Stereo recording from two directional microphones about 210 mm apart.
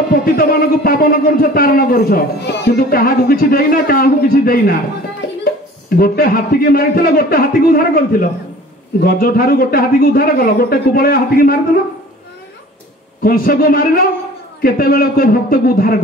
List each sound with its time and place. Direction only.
0.1 s a man's voice: 45° left (ahead or behind)
5.9 s a man's voice: 45° left (ahead or behind)
13.2 s a man's voice: 45° left (ahead or behind)